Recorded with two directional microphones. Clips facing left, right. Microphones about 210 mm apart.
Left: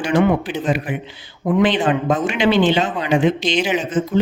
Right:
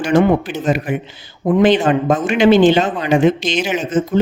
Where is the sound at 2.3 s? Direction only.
45° right (ahead or behind).